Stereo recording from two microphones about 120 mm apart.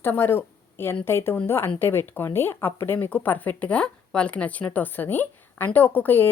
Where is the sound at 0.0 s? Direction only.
20° left (ahead or behind).